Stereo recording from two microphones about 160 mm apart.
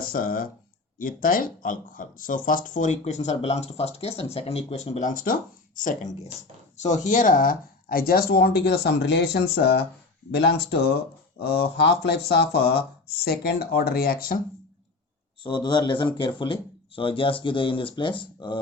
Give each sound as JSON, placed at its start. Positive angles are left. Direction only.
{"t": 0.0, "sound": "speech", "side_deg": 60}
{"t": 6.7, "sound": "speech", "side_deg": 50}
{"t": 15.4, "sound": "speech", "side_deg": 30}